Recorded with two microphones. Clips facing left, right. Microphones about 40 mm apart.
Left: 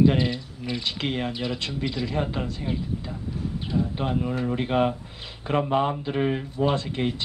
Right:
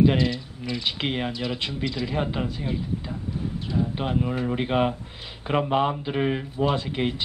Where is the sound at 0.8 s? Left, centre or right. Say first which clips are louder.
Right 1 dB; centre.